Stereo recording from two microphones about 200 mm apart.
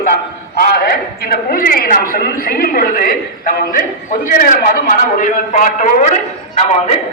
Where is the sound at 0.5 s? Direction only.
50° left (ahead or behind).